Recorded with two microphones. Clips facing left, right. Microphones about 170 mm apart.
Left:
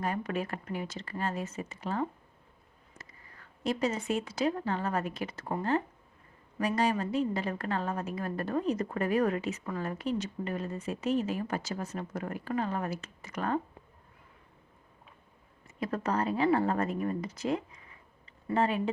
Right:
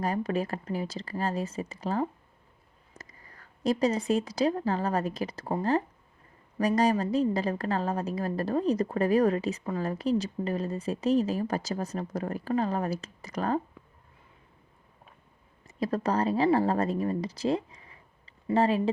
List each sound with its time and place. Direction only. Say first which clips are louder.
0.0 s a woman's voice: right 4 dB; 35° right (ahead or behind)
15.6 s a woman's voice: right 4 dB; 35° right (ahead or behind)